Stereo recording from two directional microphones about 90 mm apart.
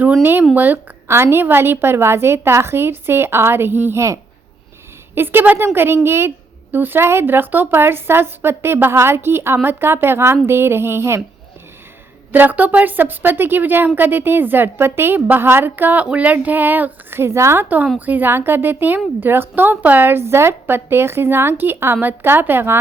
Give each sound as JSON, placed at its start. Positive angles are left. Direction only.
{"t": 0.2, "sound": "a woman's voice", "side_deg": -25}
{"t": 12.3, "sound": "a woman's voice", "side_deg": -20}